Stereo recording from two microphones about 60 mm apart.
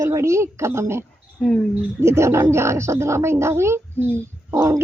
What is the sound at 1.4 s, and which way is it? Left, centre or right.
Speech, centre.